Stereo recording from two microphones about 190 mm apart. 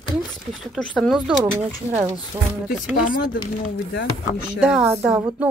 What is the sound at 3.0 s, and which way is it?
Speech, 45° left (ahead or behind).